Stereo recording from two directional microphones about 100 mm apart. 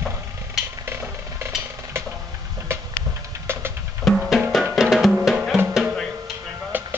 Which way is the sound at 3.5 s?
25° right (ahead or behind).